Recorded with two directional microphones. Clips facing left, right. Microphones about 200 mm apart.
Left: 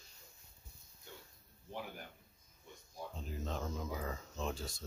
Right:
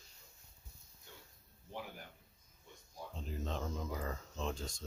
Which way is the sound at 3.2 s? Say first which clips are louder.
Right 1 dB; centre (ahead or behind).